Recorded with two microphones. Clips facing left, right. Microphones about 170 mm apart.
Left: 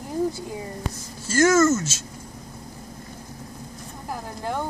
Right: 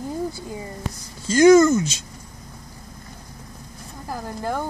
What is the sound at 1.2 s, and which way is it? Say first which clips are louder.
Speech: right 5 dB; 15° right (ahead or behind).